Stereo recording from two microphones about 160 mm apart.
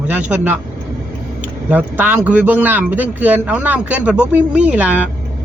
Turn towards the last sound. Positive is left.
turn(degrees=-10)  # may be behind; listen again after turning